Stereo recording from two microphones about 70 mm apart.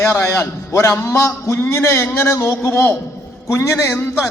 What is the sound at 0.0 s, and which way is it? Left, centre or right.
A man's voice, left.